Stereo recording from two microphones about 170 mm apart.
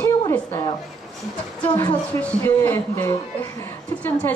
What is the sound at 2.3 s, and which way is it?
Speech, 10° left (ahead or behind).